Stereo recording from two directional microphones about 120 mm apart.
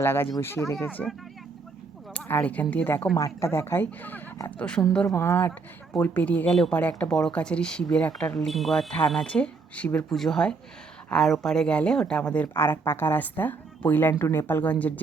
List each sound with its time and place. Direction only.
0.0 s speech: 20° left (ahead or behind)
2.1 s speech: 15° left (ahead or behind)
3.2 s speech: 25° left (ahead or behind); by 4.8 s 10° left (ahead or behind)
5.0 s speech: 20° left (ahead or behind)